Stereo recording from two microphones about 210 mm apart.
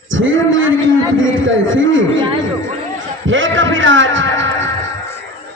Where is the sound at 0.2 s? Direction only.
65° right (ahead or behind).